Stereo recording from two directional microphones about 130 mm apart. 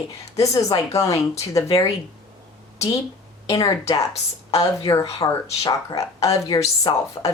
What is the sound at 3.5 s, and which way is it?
Speech, 25° left (ahead or behind).